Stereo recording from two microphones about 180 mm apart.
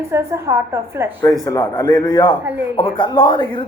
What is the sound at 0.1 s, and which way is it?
A woman's voice, 15° right (ahead or behind).